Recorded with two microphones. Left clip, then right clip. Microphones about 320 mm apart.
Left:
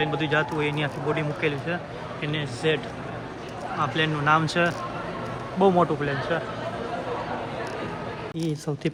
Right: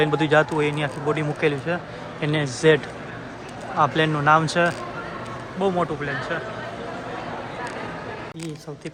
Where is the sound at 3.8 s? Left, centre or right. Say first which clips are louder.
Right 6 dB; centre.